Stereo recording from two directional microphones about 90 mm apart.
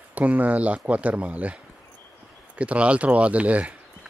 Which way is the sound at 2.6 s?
15° right (ahead or behind).